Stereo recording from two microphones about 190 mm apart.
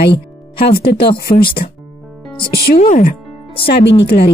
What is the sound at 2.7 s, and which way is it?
Speech, 40° left (ahead or behind).